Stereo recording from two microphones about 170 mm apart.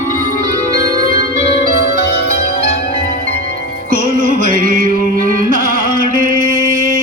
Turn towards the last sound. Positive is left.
turn(degrees=-55)  # may be behind; listen again after turning